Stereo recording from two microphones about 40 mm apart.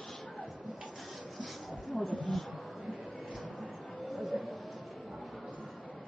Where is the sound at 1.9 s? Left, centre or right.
Left.